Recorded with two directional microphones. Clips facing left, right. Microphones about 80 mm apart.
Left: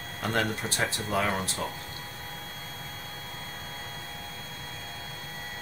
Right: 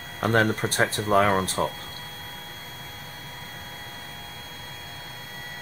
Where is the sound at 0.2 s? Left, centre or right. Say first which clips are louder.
Right 7 dB; right.